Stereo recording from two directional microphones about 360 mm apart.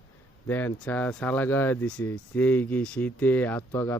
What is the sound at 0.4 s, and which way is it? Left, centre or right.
Speech, centre.